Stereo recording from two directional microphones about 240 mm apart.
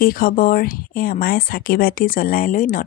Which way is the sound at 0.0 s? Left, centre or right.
Left.